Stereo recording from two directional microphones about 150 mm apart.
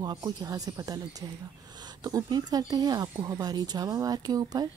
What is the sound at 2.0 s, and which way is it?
A woman's voice, 25° right (ahead or behind).